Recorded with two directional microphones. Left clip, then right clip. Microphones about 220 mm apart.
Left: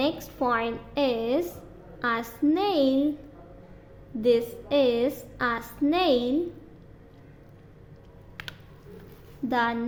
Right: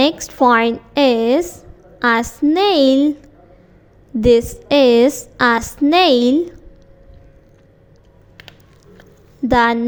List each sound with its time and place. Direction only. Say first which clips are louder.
0.0 s a woman's voice: right 13 dB; 30° right (ahead or behind)
4.2 s a woman's voice: right 10 dB; 35° right (ahead or behind)
9.5 s a woman's voice: right 12 dB; 35° right (ahead or behind)